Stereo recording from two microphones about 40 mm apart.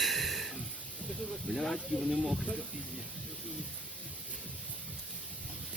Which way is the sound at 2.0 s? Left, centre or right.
Centre.